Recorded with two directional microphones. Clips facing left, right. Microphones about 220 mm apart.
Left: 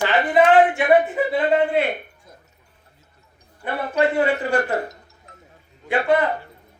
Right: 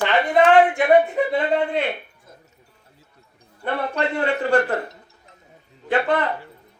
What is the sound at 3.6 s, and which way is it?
Speech, 5° left (ahead or behind).